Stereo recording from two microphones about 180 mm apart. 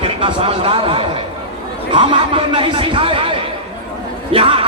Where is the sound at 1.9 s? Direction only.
30° right (ahead or behind).